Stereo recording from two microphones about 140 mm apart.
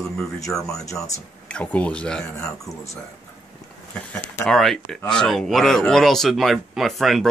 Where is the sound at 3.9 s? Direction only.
5° left (ahead or behind).